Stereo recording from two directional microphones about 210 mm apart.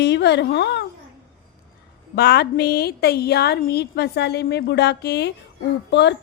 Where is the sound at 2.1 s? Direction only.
50° left (ahead or behind).